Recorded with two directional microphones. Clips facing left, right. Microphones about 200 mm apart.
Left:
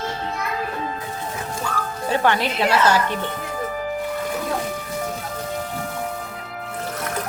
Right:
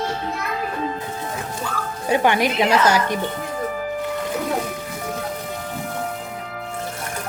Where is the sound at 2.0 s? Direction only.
15° right (ahead or behind).